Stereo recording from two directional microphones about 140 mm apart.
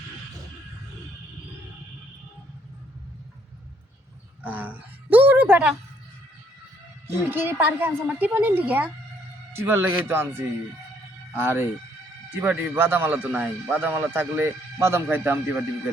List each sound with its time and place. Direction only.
4.4 s speech: 10° right (ahead or behind)
7.1 s speech: 15° right (ahead or behind)